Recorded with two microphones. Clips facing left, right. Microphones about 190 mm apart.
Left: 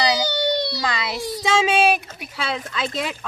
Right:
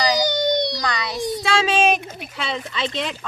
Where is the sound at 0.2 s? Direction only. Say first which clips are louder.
Right 2 dB; 15° right (ahead or behind).